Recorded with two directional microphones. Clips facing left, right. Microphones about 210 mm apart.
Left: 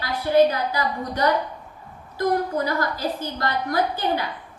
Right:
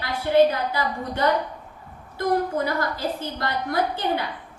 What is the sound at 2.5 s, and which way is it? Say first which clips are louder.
A woman's voice: left 1 dB; 25° right (ahead or behind).